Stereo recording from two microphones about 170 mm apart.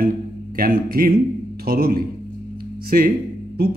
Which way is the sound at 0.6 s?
60° right (ahead or behind).